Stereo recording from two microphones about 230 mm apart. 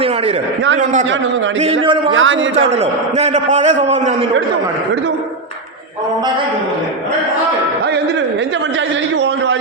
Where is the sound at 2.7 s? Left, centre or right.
Right.